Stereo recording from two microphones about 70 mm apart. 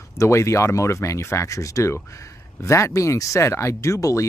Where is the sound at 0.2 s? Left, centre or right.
Left.